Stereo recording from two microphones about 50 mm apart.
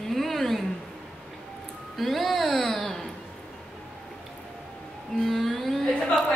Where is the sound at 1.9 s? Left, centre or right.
Centre.